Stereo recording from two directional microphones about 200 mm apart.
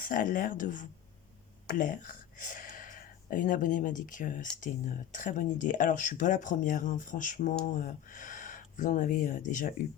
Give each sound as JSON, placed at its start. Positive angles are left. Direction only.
{"t": 0.0, "sound": "speech", "side_deg": 45}